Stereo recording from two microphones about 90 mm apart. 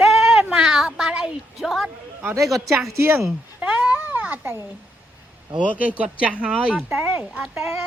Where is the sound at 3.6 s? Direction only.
15° right (ahead or behind).